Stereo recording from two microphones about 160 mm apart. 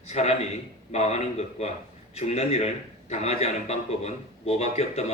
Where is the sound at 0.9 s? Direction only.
45° left (ahead or behind).